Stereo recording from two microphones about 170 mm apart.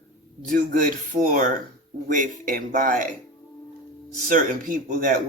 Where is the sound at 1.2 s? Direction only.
50° right (ahead or behind).